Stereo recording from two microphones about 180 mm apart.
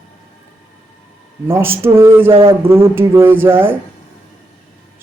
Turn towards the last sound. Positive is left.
turn(degrees=-10)  # may be behind; listen again after turning